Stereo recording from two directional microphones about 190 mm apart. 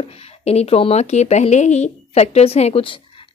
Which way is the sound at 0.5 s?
35° left (ahead or behind).